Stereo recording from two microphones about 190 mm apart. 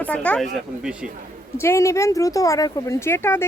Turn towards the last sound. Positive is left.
turn(degrees=15)  # may be behind; listen again after turning